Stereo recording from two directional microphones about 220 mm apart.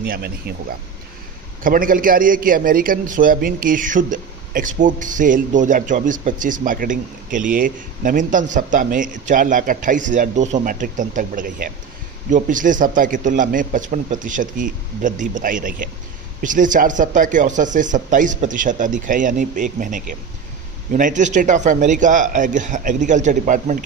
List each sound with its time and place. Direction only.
0.0 s speech: 45° right (ahead or behind)
1.6 s a man's voice: 40° right (ahead or behind)